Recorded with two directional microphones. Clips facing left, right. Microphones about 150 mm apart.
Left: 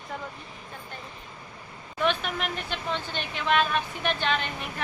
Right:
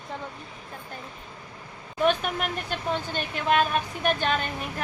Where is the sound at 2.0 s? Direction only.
45° right (ahead or behind).